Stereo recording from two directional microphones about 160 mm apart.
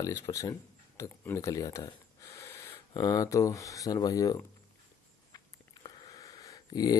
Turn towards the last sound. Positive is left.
turn(degrees=25)  # may be behind; listen again after turning